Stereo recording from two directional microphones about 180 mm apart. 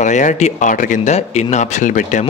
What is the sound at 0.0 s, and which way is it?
Speech, 45° left (ahead or behind).